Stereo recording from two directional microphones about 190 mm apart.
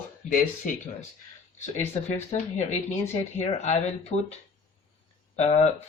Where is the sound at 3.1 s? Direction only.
35° left (ahead or behind).